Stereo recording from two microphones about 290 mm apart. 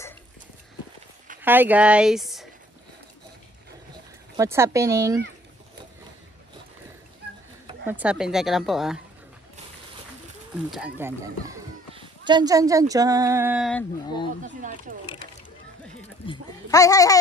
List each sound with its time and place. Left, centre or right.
1.4 s speech: centre
4.4 s speech: centre
7.2 s a sound: right
7.8 s speech: centre
10.7 s speech: centre
14.4 s speech: right
16.3 s goat: centre